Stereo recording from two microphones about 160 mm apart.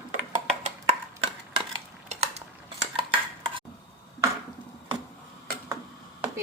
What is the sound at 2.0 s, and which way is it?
Cutlery, 40° right (ahead or behind).